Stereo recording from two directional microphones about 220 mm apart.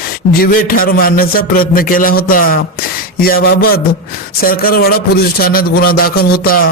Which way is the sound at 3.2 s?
45° left (ahead or behind).